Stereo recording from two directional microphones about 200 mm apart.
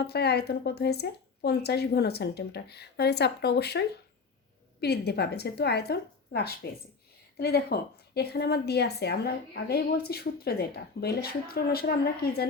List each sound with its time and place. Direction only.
0.0 s speech: 55° left (ahead or behind)